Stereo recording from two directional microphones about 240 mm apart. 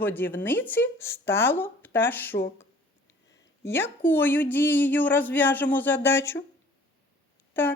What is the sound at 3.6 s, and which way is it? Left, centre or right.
Speech, centre.